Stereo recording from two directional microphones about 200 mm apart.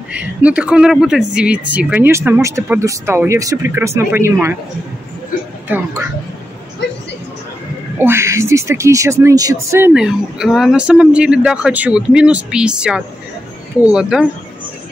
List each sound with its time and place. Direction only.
0.1 s speech: 5° right (ahead or behind)
5.7 s speech: 10° right (ahead or behind)
6.8 s a sound: 60° left (ahead or behind)
8.0 s speech: 10° right (ahead or behind)